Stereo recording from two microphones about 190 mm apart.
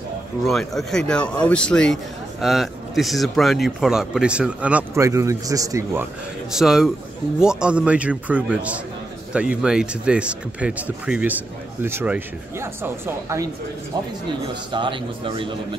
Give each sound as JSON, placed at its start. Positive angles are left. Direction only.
{"t": 0.5, "sound": "speech", "side_deg": 0}
{"t": 6.5, "sound": "speech", "side_deg": 0}
{"t": 14.7, "sound": "a man's voice", "side_deg": -25}